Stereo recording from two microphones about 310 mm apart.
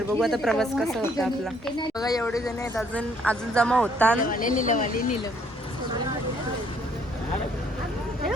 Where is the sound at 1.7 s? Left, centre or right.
Centre.